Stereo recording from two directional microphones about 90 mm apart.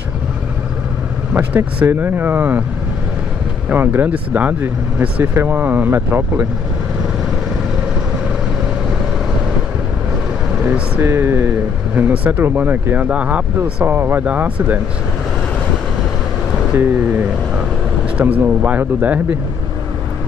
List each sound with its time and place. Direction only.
1.3 s speech: 20° right (ahead or behind)
3.7 s speech: 20° right (ahead or behind)
10.6 s speech: 20° right (ahead or behind)
18.1 s speech: 20° right (ahead or behind)